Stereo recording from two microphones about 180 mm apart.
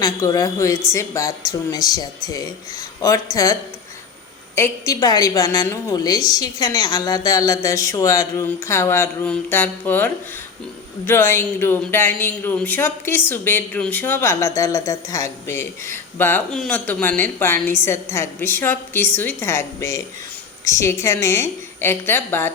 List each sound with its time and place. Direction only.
0.0 s a man's voice: 15° left (ahead or behind)